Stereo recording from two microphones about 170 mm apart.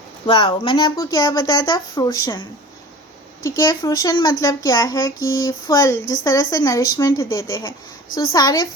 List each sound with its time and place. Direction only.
0.3 s speech: 30° left (ahead or behind)
3.4 s speech: 20° left (ahead or behind)